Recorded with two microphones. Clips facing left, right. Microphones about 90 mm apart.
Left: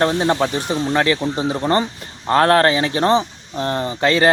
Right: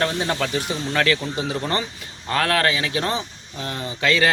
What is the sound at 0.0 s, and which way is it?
Speech, 30° left (ahead or behind).